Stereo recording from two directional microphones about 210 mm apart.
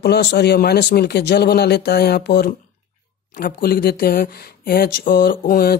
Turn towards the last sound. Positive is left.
turn(degrees=45)  # may be behind; listen again after turning